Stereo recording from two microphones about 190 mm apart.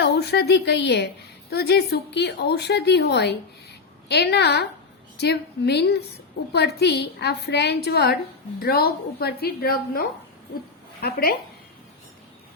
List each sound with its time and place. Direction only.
0.0 s a woman's voice: 60° left (ahead or behind)